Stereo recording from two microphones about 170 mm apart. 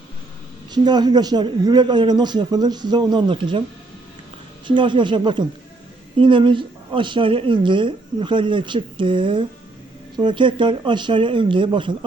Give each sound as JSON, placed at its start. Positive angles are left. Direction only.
{"t": 0.7, "sound": "speech", "side_deg": -25}
{"t": 4.6, "sound": "speech", "side_deg": -30}